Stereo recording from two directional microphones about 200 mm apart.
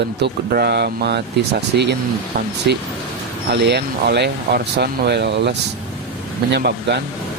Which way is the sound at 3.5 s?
55° right (ahead or behind).